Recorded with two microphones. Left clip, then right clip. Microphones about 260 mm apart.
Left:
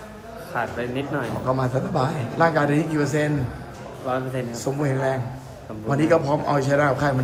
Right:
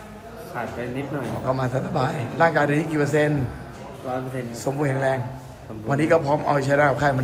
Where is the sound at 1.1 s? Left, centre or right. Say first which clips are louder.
Left 1 dB; centre.